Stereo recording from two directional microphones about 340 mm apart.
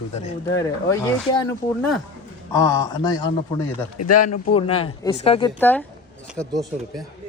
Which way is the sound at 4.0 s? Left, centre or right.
Left.